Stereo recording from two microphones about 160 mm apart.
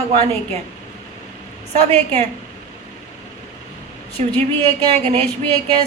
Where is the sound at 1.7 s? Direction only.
45° right (ahead or behind).